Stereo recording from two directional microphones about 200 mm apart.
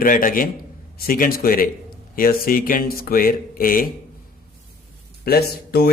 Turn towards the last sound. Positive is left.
turn(degrees=50)  # may be behind; listen again after turning